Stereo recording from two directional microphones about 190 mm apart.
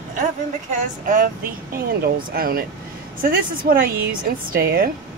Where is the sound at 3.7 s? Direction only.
50° right (ahead or behind).